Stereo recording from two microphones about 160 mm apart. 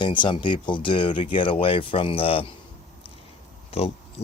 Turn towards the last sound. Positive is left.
turn(degrees=40)  # may be behind; listen again after turning